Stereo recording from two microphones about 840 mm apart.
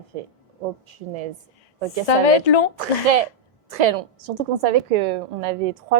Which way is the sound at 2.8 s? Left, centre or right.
Right.